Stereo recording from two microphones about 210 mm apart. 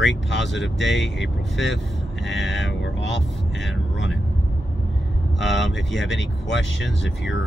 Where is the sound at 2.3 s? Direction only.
Centre (ahead or behind).